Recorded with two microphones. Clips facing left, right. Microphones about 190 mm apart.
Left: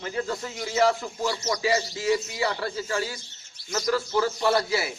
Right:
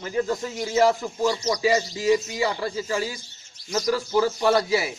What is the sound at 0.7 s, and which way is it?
Speech, 15° right (ahead or behind).